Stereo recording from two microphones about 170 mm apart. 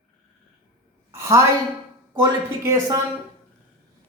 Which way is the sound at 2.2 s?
15° right (ahead or behind).